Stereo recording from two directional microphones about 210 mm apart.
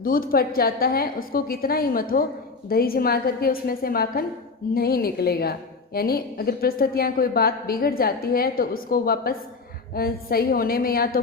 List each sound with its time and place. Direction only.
0.0 s a woman's voice: 45° left (ahead or behind)